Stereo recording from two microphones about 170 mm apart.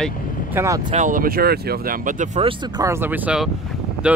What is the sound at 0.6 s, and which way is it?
Speech, 15° right (ahead or behind).